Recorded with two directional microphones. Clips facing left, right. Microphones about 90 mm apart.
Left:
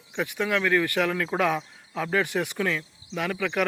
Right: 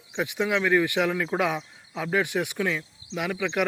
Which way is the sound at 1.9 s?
5° right (ahead or behind).